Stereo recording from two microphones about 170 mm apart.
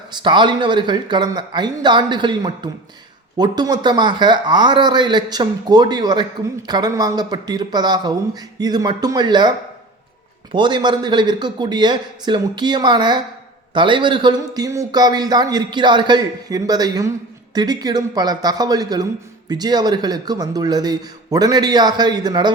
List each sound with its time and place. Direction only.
0.1 s a man's voice: 25° right (ahead or behind)